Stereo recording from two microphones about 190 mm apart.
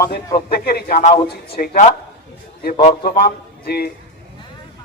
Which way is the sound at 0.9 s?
45° left (ahead or behind).